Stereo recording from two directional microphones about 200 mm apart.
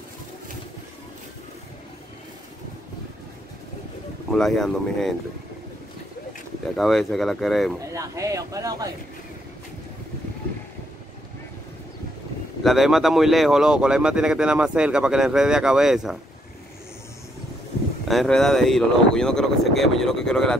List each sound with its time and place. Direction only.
4.3 s speech: centre (ahead or behind)
6.8 s speech: centre (ahead or behind)
7.8 s speech: 15° right (ahead or behind)
12.6 s speech: centre (ahead or behind)
18.0 s speech: centre (ahead or behind)